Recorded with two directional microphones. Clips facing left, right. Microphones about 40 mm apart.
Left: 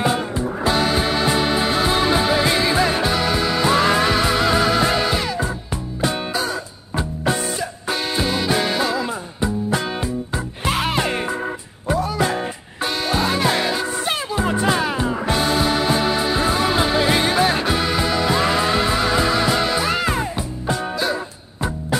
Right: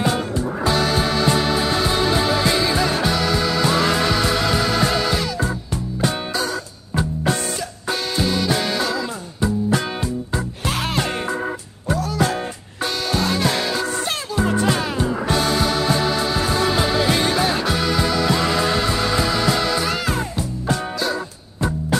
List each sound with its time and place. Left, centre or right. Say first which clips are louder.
1.0 s music: even; centre
8.2 s music: even; centre